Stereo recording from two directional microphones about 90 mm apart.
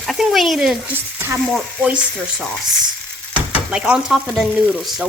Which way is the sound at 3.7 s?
10° right (ahead or behind).